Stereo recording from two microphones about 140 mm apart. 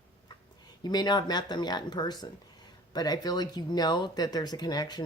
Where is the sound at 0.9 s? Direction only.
30° left (ahead or behind).